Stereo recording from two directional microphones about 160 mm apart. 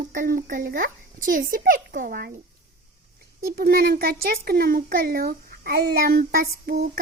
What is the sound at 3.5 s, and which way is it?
Speech, 75° right (ahead or behind).